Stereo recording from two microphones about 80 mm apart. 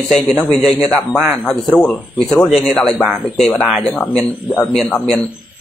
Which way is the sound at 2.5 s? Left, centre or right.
Centre.